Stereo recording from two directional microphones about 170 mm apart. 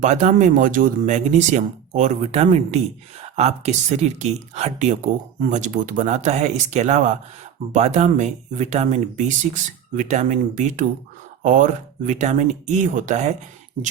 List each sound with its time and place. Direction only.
0.0 s speech: 45° right (ahead or behind)